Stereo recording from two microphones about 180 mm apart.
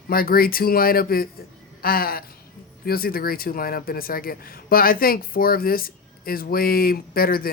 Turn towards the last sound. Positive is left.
turn(degrees=55)  # may be behind; listen again after turning